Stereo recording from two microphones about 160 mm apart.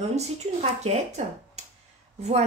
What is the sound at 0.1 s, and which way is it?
A woman's voice, 45° right (ahead or behind).